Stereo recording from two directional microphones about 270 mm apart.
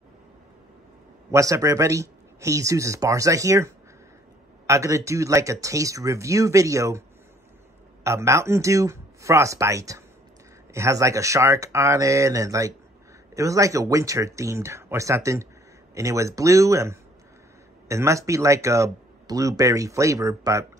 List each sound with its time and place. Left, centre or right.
1.3 s speech: centre